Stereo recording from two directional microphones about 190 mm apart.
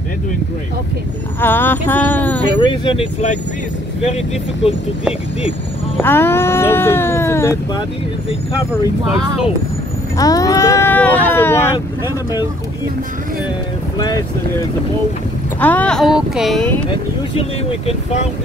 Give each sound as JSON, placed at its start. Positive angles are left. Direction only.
{"t": 1.4, "sound": "a sound", "side_deg": 10}
{"t": 2.6, "sound": "speech", "side_deg": 25}
{"t": 6.0, "sound": "speech", "side_deg": 10}
{"t": 10.1, "sound": "speech", "side_deg": 20}
{"t": 13.9, "sound": "speech", "side_deg": 20}
{"t": 15.6, "sound": "speech", "side_deg": 10}
{"t": 17.4, "sound": "speech", "side_deg": 30}